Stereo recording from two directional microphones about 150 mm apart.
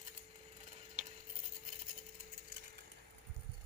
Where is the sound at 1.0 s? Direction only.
10° right (ahead or behind).